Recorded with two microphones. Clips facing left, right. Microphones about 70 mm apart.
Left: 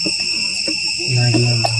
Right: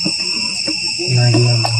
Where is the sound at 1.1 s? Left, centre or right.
Centre.